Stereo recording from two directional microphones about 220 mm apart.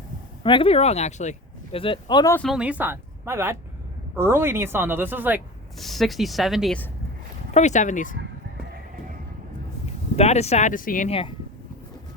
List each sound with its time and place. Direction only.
0.4 s speech: 25° left (ahead or behind)
2.3 s speech: centre (ahead or behind)
7.5 s speech: 30° left (ahead or behind)
10.2 s speech: 30° left (ahead or behind)